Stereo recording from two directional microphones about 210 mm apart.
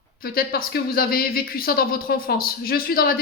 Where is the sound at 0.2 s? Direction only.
45° left (ahead or behind).